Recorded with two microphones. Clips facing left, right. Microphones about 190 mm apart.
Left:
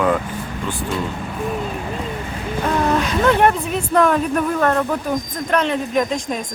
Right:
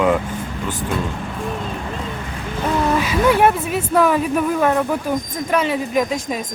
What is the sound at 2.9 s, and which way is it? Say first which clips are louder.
Speech: right 1 dB; 5° right (ahead or behind).